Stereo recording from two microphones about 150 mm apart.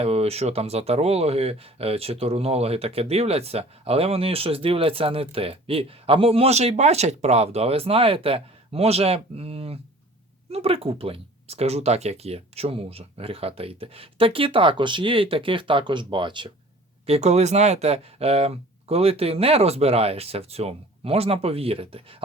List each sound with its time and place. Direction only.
0.0 s speech: 45° right (ahead or behind)
17.1 s speech: 45° right (ahead or behind)